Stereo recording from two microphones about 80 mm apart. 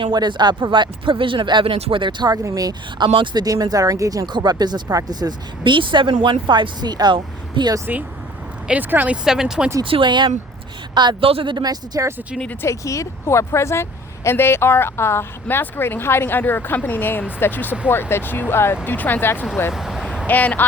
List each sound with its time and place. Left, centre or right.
0.0 s speech: right
2.4 s speech: right
3.0 s speech: right
3.4 s speech: right
4.3 s speech: right
8.6 s speech: centre
9.2 s speech: centre
9.8 s speech: right
10.9 s speech: right
12.6 s speech: left
19.7 s vehicle: centre
20.2 s speech: centre